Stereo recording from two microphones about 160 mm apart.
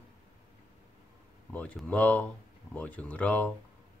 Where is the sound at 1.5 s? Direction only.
10° left (ahead or behind).